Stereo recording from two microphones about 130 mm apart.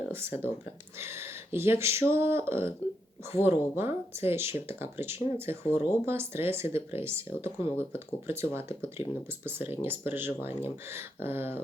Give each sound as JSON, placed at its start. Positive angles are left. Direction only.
{"t": 0.1, "sound": "speech", "side_deg": -20}